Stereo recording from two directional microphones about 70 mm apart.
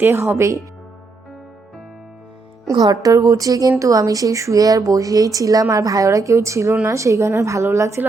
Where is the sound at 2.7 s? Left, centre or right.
Right.